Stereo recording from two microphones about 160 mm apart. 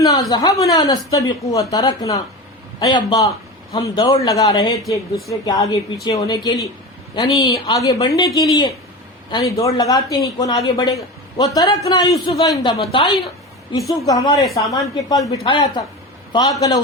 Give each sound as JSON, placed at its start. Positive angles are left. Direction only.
{"t": 0.0, "sound": "a man's voice", "side_deg": 25}
{"t": 12.7, "sound": "a woman's voice", "side_deg": 40}
{"t": 13.7, "sound": "speech", "side_deg": 20}